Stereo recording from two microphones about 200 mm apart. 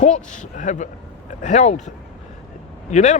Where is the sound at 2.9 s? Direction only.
35° left (ahead or behind).